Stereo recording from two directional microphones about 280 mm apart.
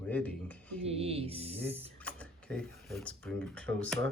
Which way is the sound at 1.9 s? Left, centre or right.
Centre.